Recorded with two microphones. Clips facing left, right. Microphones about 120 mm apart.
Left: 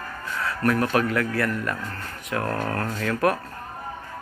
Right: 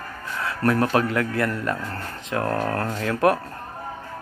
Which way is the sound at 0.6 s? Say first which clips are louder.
Right 2 dB; 30° right (ahead or behind).